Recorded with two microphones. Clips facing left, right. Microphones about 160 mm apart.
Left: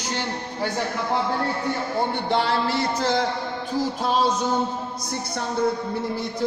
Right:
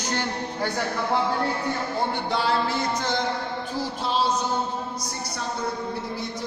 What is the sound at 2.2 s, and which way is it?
Speech, 65° left (ahead or behind).